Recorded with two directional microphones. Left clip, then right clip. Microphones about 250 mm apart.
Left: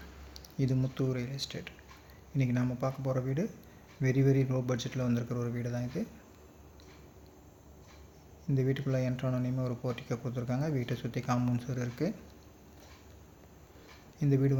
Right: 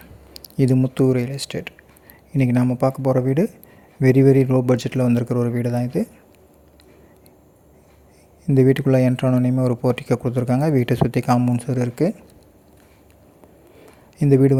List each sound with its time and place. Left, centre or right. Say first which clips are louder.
0.3 s speech: right 15 dB; right
8.4 s speech: right 17 dB; right
14.2 s speech: right 15 dB; right